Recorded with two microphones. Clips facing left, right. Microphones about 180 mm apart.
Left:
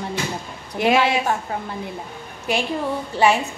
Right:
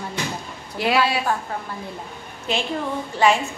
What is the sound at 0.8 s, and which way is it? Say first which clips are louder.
Speech: left 3 dB; 20° left (ahead or behind).